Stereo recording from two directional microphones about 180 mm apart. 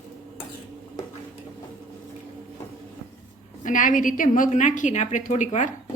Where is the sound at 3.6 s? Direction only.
45° left (ahead or behind).